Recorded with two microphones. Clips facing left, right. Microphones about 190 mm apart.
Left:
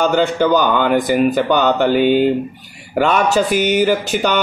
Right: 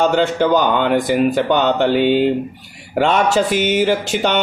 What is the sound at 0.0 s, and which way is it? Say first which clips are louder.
Speech: even; 25° right (ahead or behind).